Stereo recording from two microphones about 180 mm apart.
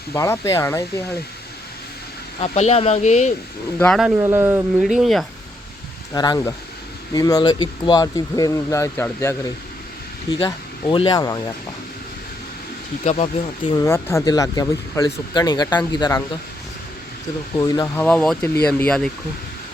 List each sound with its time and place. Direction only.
0.1 s speech: 15° left (ahead or behind)
2.4 s speech: 35° left (ahead or behind)
3.8 s speech: 5° left (ahead or behind)
4.2 s speech: 15° right (ahead or behind)
4.8 s speech: centre (ahead or behind)
6.1 s speech: 20° left (ahead or behind)
10.3 s speech: 30° left (ahead or behind)
13.1 s speech: 40° left (ahead or behind)
13.7 s speech: 15° left (ahead or behind)
17.6 s speech: 20° left (ahead or behind)